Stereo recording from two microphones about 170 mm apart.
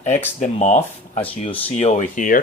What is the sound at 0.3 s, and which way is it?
Speech, 45° left (ahead or behind).